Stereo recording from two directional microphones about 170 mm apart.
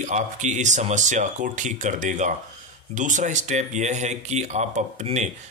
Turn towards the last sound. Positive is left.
turn(degrees=-45)  # may be behind; listen again after turning